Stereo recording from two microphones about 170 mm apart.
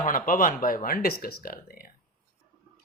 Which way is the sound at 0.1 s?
55° left (ahead or behind).